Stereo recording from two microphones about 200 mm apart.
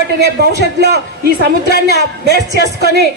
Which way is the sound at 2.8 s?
55° right (ahead or behind).